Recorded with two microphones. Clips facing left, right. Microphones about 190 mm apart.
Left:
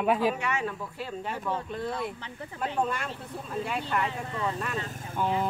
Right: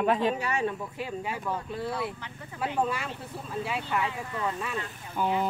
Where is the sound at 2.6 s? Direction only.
5° right (ahead or behind).